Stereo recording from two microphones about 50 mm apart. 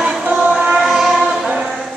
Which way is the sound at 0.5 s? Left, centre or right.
Centre.